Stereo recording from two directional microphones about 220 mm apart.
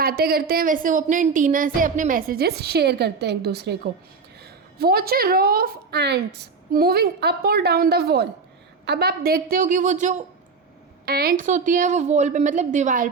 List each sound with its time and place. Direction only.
0.0 s a woman's voice: 45° right (ahead or behind)
4.8 s a woman's voice: 45° right (ahead or behind)
11.0 s a woman's voice: 45° right (ahead or behind)